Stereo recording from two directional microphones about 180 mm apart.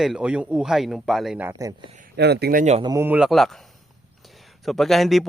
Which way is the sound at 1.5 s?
20° right (ahead or behind).